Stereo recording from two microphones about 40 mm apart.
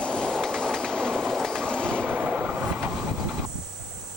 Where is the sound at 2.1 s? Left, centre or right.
Right.